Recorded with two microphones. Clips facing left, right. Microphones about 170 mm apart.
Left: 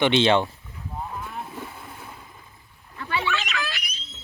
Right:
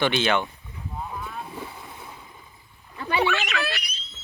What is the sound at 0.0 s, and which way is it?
Speech, 25° left (ahead or behind).